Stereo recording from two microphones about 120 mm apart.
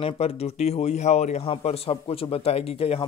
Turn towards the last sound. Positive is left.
turn(degrees=55)  # may be behind; listen again after turning